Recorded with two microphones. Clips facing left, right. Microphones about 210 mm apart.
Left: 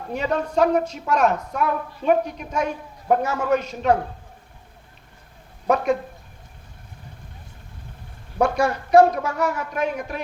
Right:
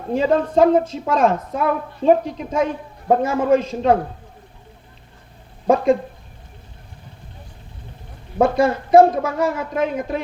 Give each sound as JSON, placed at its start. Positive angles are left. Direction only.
{"t": 0.1, "sound": "a man's voice", "side_deg": -30}
{"t": 5.6, "sound": "a man's voice", "side_deg": -30}
{"t": 8.4, "sound": "a man's voice", "side_deg": -25}